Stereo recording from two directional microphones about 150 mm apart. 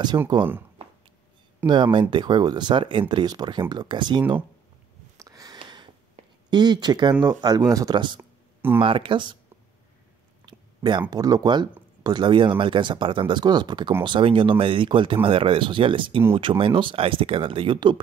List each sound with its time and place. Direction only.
0.4 s speech: 15° right (ahead or behind)
1.7 s speech: 30° right (ahead or behind)
5.1 s a sound: 25° right (ahead or behind)
6.2 s a sound: 50° right (ahead or behind)
6.5 s speech: 30° right (ahead or behind)
10.4 s speech: 30° right (ahead or behind)